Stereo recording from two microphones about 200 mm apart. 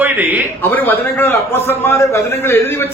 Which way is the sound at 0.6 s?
10° left (ahead or behind).